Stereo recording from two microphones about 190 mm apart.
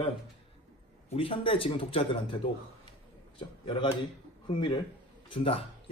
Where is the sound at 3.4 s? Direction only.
25° left (ahead or behind).